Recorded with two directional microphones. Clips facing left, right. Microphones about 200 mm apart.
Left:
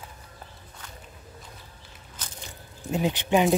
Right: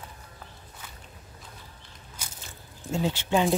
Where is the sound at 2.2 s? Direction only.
10° right (ahead or behind).